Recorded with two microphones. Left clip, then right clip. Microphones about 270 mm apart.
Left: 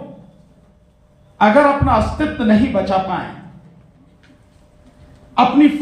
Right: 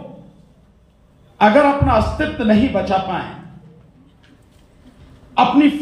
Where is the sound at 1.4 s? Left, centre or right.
Centre.